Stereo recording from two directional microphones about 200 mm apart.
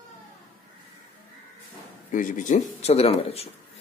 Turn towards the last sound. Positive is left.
turn(degrees=30)  # may be behind; listen again after turning